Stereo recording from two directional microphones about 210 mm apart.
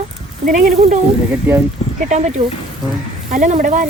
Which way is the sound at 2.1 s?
35° right (ahead or behind).